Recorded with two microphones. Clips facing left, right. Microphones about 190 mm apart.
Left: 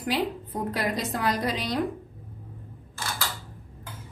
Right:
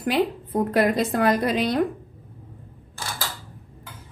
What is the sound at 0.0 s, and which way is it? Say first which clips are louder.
A woman's voice: right 5 dB; 55° right (ahead or behind).